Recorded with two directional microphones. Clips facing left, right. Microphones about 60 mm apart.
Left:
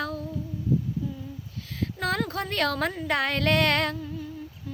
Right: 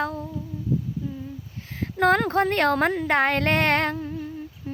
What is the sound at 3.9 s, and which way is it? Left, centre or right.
Humming, right.